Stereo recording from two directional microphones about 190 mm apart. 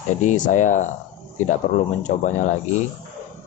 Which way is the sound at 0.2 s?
40° left (ahead or behind).